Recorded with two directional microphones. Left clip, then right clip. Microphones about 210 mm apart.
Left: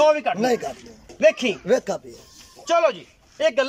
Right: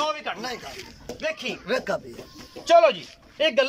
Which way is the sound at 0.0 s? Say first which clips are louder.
Left 10 dB; 55° left (ahead or behind).